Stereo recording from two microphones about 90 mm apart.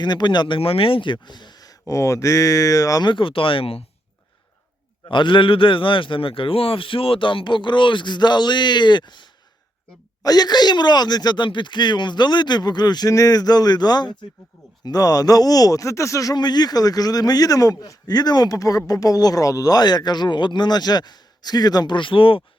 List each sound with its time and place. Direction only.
0.0 s speech: 55° left (ahead or behind)
3.0 s a man's voice: 65° left (ahead or behind); by 3.8 s 90° left
5.0 s a man's voice: 65° left (ahead or behind)
10.2 s speech: 50° left (ahead or behind)
13.1 s speech: 40° left (ahead or behind)
14.8 s speech: 45° left (ahead or behind); by 22.4 s 75° left (ahead or behind)